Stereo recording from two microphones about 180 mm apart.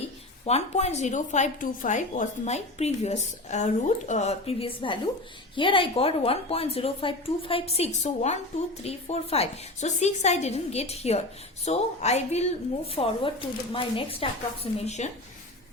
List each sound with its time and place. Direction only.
0.4 s a woman's voice: 35° left (ahead or behind)